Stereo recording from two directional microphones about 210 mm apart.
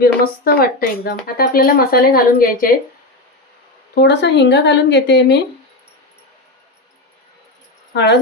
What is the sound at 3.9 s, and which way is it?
Speech, 55° left (ahead or behind).